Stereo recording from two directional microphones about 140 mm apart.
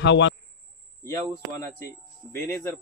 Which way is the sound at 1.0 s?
20° left (ahead or behind).